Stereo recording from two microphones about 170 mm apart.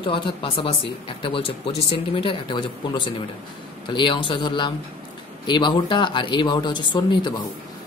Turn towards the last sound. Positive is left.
turn(degrees=25)  # may be behind; listen again after turning